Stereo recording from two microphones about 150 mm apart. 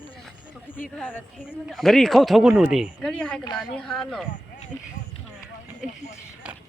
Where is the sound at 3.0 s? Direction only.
5° left (ahead or behind).